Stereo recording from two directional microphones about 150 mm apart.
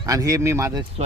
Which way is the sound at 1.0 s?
45° right (ahead or behind).